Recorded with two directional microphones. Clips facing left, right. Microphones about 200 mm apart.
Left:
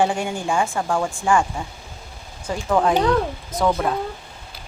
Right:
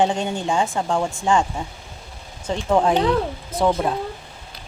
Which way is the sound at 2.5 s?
25° right (ahead or behind).